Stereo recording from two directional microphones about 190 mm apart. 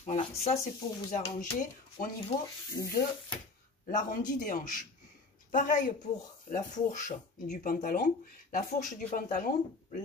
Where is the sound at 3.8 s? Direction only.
40° left (ahead or behind).